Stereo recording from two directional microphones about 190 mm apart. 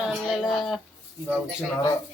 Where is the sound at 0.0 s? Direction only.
5° right (ahead or behind).